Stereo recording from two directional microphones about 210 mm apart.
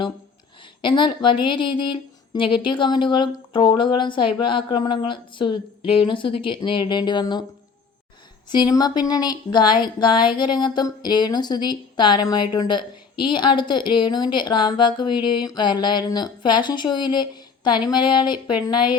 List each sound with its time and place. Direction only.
0.8 s speech: 20° left (ahead or behind)
8.4 s speech: 20° left (ahead or behind)